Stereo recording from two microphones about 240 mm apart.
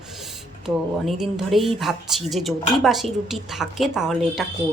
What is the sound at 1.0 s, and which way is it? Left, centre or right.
Speech, centre.